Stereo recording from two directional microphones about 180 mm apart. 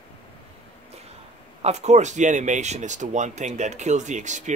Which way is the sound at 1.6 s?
40° right (ahead or behind).